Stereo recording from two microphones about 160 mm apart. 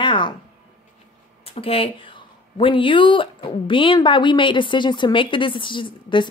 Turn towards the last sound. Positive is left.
turn(degrees=30)  # may be behind; listen again after turning